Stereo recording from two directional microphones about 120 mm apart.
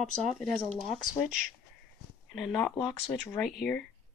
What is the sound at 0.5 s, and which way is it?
Speech, centre (ahead or behind).